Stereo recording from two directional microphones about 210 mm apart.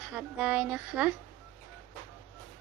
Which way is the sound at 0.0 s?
5° right (ahead or behind).